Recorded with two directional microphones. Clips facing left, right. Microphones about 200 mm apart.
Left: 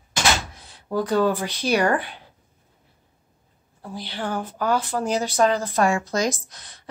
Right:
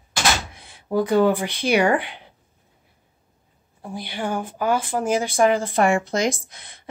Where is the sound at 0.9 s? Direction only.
15° right (ahead or behind).